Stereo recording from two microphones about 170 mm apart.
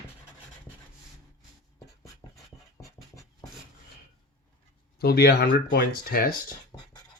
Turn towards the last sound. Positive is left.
turn(degrees=20)  # may be behind; listen again after turning